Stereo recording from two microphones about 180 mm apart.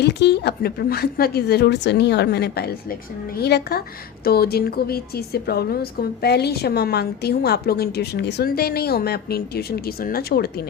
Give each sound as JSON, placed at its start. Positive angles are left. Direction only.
{"t": 0.0, "sound": "a woman's voice", "side_deg": 70}